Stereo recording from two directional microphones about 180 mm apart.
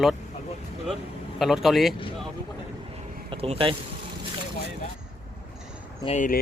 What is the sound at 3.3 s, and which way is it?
Speech, 30° right (ahead or behind).